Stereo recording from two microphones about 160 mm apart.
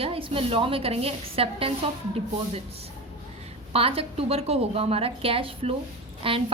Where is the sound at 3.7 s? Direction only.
35° right (ahead or behind).